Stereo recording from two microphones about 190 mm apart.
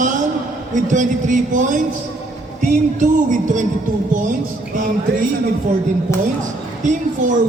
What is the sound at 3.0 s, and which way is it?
Speech, 40° right (ahead or behind).